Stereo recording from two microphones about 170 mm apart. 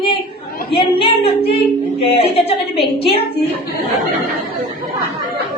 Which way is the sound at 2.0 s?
35° left (ahead or behind).